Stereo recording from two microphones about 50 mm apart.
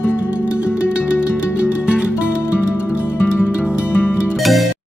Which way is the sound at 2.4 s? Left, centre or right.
Left.